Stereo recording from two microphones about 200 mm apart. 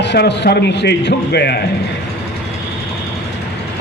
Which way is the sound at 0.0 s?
60° left (ahead or behind).